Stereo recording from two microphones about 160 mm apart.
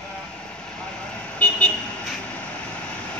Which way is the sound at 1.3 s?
10° left (ahead or behind).